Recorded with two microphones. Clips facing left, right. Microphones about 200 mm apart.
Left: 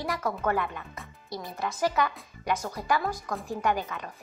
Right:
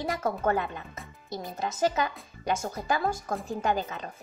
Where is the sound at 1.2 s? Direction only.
45° right (ahead or behind).